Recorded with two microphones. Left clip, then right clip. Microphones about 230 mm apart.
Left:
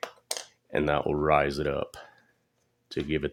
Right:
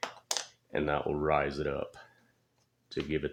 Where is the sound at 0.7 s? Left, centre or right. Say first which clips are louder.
Left 5 dB; left.